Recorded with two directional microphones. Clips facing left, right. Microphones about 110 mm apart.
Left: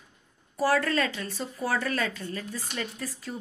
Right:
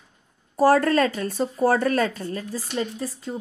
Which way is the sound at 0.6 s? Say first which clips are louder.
Right 7 dB; 45° right (ahead or behind).